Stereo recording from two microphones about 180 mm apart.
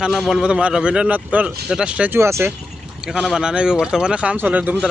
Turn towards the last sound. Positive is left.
turn(degrees=-10)  # may be behind; listen again after turning